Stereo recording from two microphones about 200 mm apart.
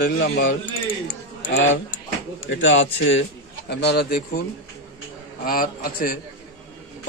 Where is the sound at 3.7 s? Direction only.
55° left (ahead or behind).